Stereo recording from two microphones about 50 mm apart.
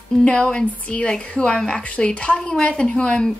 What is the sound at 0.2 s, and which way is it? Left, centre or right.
Speech, centre.